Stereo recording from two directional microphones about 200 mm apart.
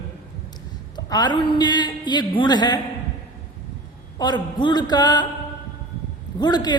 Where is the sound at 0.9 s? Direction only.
20° left (ahead or behind).